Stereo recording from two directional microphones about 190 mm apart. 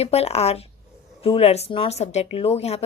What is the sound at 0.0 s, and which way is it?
A woman's voice, 35° left (ahead or behind).